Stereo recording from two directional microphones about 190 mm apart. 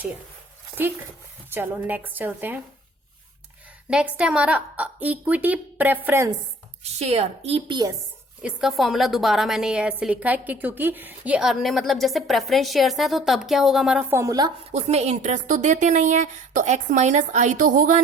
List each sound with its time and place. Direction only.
1.5 s a woman's voice: 10° right (ahead or behind)
3.8 s a woman's voice: 5° right (ahead or behind)
7.0 s a woman's voice: 35° right (ahead or behind)
8.4 s a woman's voice: 5° right (ahead or behind)
14.7 s a woman's voice: 35° right (ahead or behind)